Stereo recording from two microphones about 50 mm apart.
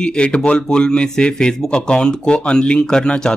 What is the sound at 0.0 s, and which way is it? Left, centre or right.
Speech, centre.